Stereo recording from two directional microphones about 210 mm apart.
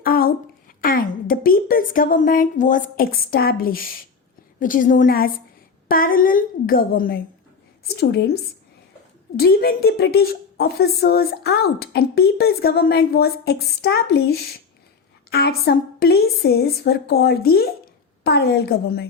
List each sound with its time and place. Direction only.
0.0 s a sound: 45° left (ahead or behind)
0.8 s a woman's voice: 45° left (ahead or behind)
9.4 s a woman's voice: 45° left (ahead or behind)